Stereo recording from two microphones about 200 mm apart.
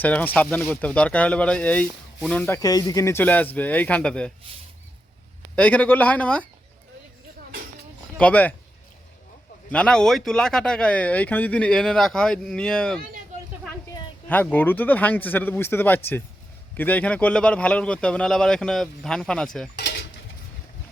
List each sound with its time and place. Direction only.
0.0 s speech: 5° left (ahead or behind)
5.5 s speech: 5° left (ahead or behind)
8.2 s speech: 10° left (ahead or behind)
9.7 s speech: 5° left (ahead or behind)
14.3 s speech: 10° left (ahead or behind)
19.7 s a sound: 55° left (ahead or behind)